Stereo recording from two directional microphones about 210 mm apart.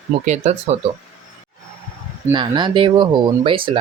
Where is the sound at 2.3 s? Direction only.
20° right (ahead or behind).